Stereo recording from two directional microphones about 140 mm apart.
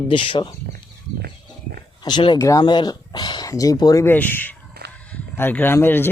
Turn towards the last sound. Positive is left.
turn(degrees=15)  # may be behind; listen again after turning